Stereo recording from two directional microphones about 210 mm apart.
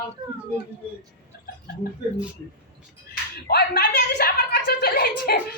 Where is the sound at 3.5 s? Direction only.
50° left (ahead or behind).